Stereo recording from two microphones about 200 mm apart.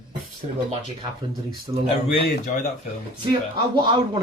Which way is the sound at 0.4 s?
30° right (ahead or behind).